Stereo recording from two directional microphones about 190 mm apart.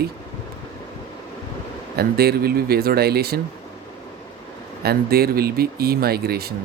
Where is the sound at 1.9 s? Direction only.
55° right (ahead or behind).